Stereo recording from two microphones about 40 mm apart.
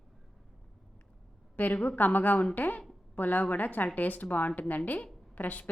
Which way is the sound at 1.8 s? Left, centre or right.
Left.